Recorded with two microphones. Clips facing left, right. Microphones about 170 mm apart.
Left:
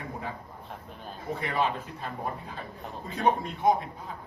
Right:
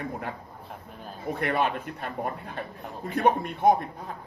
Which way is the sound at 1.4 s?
65° right (ahead or behind).